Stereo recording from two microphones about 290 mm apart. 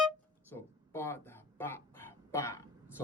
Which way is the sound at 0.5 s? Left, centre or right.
Centre.